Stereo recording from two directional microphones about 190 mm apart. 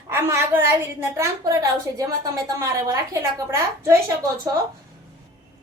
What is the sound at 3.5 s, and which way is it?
Speech, 15° right (ahead or behind).